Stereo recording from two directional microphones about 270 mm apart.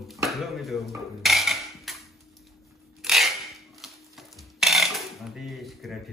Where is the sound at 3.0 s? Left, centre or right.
Centre.